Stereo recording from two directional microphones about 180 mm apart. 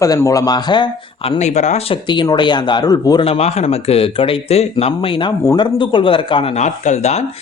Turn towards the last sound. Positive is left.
turn(degrees=40)  # may be behind; listen again after turning